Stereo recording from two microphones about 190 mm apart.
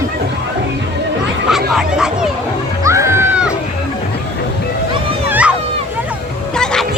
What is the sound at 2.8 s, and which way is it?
Music, 15° right (ahead or behind).